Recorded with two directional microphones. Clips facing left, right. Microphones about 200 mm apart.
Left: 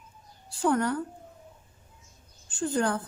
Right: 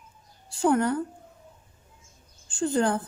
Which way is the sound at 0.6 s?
25° right (ahead or behind).